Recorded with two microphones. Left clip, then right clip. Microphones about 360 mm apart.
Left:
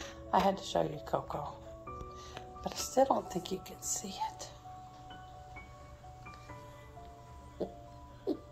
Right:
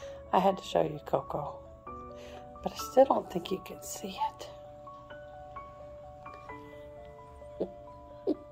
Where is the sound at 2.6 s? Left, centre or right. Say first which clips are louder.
Right 6 dB; right.